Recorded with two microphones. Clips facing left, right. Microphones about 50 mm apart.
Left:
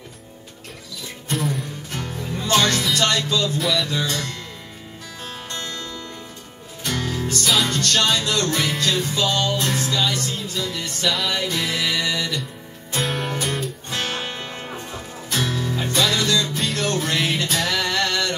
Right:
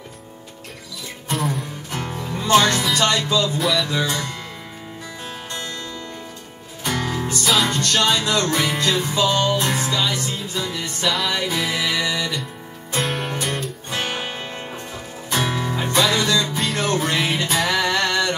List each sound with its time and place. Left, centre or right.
1.3 s music: centre
2.0 s music: right
2.4 s music: centre
3.5 s music: centre; by 7.4 s right
7.4 s music: centre
7.7 s music: centre
11.1 s music: centre
12.9 s music: centre
13.8 s music: centre